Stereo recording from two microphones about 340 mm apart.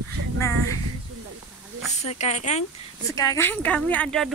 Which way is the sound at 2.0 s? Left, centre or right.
Centre.